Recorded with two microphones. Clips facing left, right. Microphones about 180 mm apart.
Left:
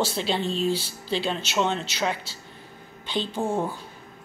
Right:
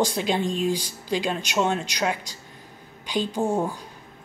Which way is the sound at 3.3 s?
15° right (ahead or behind).